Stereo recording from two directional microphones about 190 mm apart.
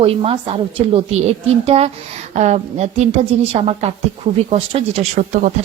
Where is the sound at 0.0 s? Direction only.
30° right (ahead or behind).